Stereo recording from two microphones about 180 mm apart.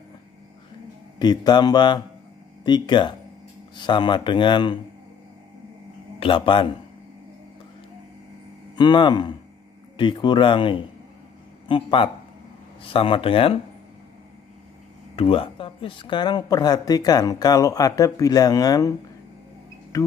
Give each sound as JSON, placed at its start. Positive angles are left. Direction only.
{"t": 1.2, "sound": "speech", "side_deg": 25}
{"t": 6.1, "sound": "a man's voice", "side_deg": 30}
{"t": 8.7, "sound": "speech", "side_deg": 25}
{"t": 15.1, "sound": "speech", "side_deg": 30}